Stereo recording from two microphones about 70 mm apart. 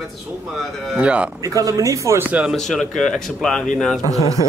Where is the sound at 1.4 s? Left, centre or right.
Right.